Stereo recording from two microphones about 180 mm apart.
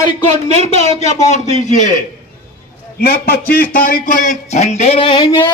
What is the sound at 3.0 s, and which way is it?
A man's voice, 60° left (ahead or behind).